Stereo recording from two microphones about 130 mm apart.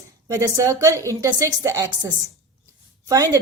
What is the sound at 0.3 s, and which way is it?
A woman's voice, 25° right (ahead or behind).